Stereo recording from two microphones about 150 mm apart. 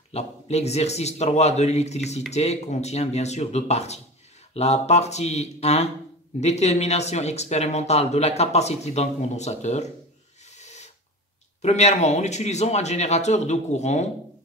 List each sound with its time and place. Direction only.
0.1 s speech: 45° left (ahead or behind)
10.5 s filing: 50° left (ahead or behind)
11.6 s speech: 45° left (ahead or behind)